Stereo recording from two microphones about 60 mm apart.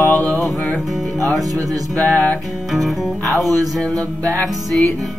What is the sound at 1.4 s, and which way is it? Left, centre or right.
Speech, right.